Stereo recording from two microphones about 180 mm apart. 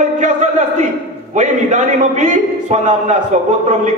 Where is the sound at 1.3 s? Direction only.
40° right (ahead or behind).